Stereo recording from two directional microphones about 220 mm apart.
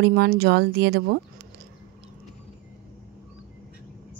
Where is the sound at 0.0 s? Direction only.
50° right (ahead or behind).